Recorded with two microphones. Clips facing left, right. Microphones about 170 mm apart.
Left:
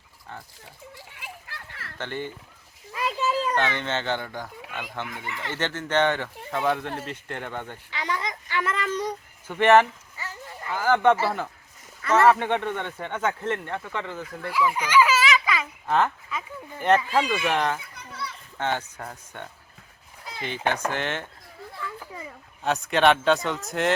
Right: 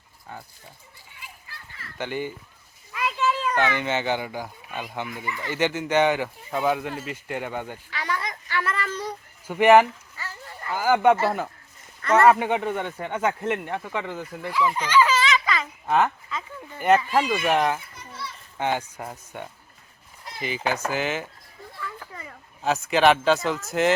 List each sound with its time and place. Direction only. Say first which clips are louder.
0.9 s children playing: left 5 dB; 75° left (ahead or behind)
2.0 s speech: right 3 dB; 10° right (ahead or behind)
2.9 s a sound: even; 35° left (ahead or behind)
3.5 s speech: right 2 dB; 10° right (ahead or behind)
7.9 s a child's voice: left 3 dB; 20° left (ahead or behind)
9.5 s speech: right 2 dB; 10° right (ahead or behind)
10.2 s a sound: left 3 dB; 15° left (ahead or behind)
10.7 s speech: right 1 dB; 10° right (ahead or behind)
12.0 s speech: right 1 dB; 5° left (ahead or behind)
12.3 s speech: right 1 dB; 10° right (ahead or behind)
14.5 s a sound: even; 10° left (ahead or behind)
15.9 s speech: right 1 dB; 10° right (ahead or behind)
22.6 s speech: right 1 dB; centre (ahead or behind)